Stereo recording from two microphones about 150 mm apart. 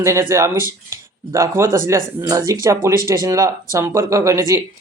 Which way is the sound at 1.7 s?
20° right (ahead or behind).